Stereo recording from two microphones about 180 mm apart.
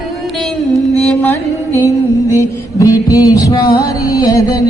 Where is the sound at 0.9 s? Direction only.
5° left (ahead or behind).